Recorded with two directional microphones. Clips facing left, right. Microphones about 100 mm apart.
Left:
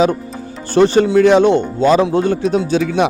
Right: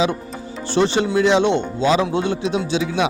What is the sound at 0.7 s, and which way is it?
Speech, 45° left (ahead or behind).